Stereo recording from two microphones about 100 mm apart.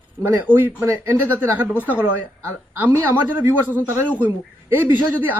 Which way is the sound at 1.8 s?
15° right (ahead or behind).